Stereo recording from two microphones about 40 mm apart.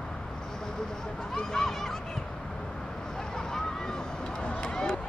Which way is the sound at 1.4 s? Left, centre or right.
Centre.